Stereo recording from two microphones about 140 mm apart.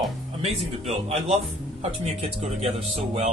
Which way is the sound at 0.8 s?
50° right (ahead or behind).